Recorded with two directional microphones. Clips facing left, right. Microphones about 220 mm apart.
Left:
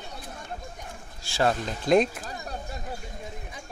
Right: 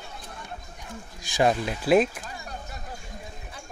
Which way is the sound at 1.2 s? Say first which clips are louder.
Right 2 dB; 15° right (ahead or behind).